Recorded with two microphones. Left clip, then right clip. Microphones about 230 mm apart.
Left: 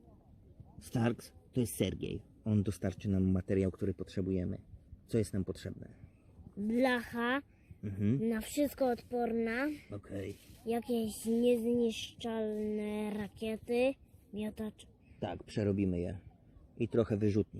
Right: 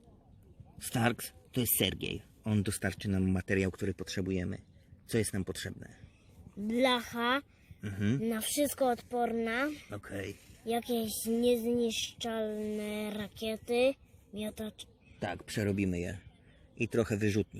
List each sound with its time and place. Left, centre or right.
0.8 s speech: centre
6.7 s speech: left
7.8 s speech: centre
8.2 s speech: left
9.9 s speech: centre
10.7 s speech: left
15.2 s speech: centre